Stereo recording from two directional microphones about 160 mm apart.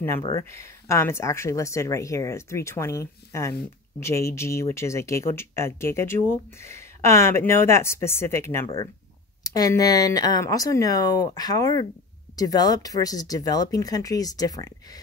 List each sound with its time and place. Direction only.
0.5 s speech: 20° left (ahead or behind)